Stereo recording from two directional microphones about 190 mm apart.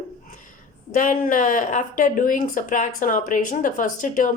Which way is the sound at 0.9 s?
40° left (ahead or behind).